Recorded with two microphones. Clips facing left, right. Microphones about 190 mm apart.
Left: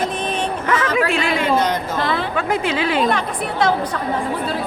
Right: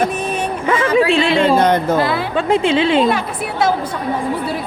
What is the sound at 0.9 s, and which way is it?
Speech, 30° right (ahead or behind).